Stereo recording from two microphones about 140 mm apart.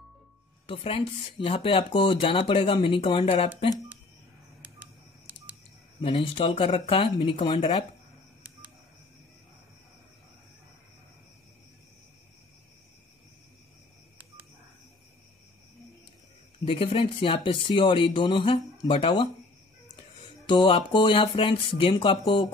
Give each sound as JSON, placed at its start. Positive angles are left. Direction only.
{"t": 0.7, "sound": "speech", "side_deg": 40}
{"t": 4.6, "sound": "telephone dialing", "side_deg": -10}
{"t": 5.9, "sound": "speech", "side_deg": 40}
{"t": 16.6, "sound": "speech", "side_deg": 40}
{"t": 20.4, "sound": "speech", "side_deg": 35}